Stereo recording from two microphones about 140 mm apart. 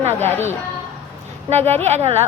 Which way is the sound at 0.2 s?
15° left (ahead or behind).